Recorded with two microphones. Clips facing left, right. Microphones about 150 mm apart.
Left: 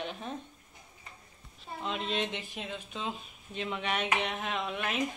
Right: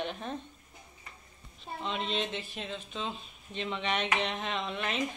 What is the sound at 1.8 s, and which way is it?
Speech, 5° left (ahead or behind).